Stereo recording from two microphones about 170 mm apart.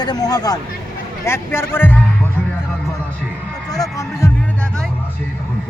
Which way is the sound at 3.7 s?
20° left (ahead or behind).